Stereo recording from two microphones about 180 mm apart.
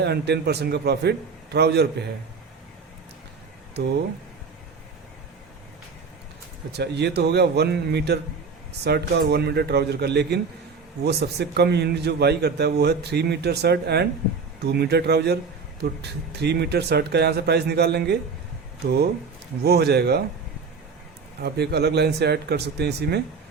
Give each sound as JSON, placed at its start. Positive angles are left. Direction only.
{"t": 0.0, "sound": "a man's voice", "side_deg": -65}
{"t": 6.7, "sound": "a man's voice", "side_deg": -70}
{"t": 19.6, "sound": "a man's voice", "side_deg": -65}
{"t": 21.4, "sound": "a man's voice", "side_deg": -65}